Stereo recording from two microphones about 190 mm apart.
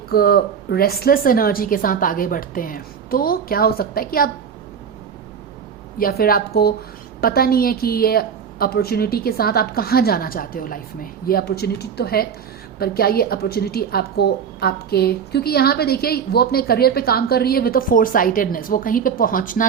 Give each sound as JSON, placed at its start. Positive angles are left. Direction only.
{"t": 0.1, "sound": "a woman's voice", "side_deg": 55}
{"t": 6.0, "sound": "a woman's voice", "side_deg": 50}